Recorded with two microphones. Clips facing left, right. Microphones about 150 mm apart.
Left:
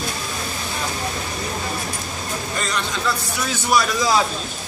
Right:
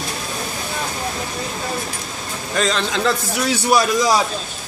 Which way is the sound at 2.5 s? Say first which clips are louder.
Right 8 dB; 90° right.